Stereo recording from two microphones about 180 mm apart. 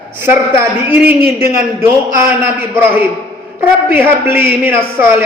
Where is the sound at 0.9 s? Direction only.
10° right (ahead or behind).